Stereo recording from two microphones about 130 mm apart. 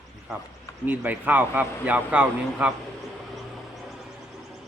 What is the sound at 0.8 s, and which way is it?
Speech, 15° right (ahead or behind).